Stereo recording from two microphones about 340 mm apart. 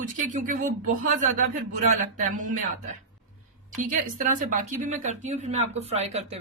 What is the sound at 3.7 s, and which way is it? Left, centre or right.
Speech, right.